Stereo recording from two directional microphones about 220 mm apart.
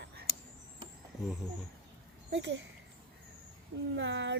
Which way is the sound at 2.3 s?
55° right (ahead or behind).